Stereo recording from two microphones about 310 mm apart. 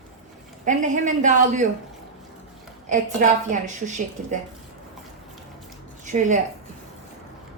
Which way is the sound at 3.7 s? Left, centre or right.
Right.